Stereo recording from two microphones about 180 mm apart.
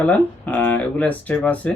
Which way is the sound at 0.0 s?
10° left (ahead or behind).